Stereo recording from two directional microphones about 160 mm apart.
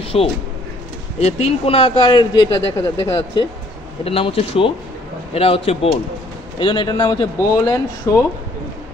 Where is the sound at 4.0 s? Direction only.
35° left (ahead or behind).